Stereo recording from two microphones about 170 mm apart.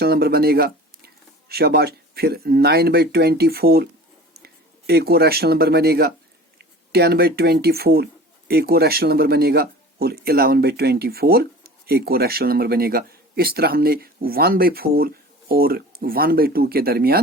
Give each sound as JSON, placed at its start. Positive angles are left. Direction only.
{"t": 0.0, "sound": "speech", "side_deg": -65}